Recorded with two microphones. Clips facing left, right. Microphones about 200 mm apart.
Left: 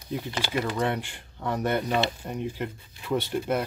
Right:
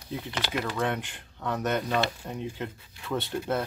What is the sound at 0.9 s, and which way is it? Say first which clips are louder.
Speech: left 2 dB; 10° left (ahead or behind).